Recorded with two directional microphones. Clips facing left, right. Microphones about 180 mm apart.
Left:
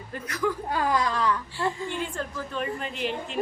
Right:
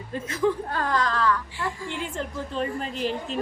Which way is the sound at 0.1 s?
25° right (ahead or behind).